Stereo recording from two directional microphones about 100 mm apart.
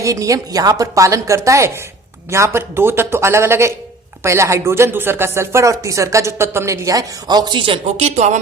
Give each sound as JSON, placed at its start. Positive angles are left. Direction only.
{"t": 0.0, "sound": "a woman's voice", "side_deg": -35}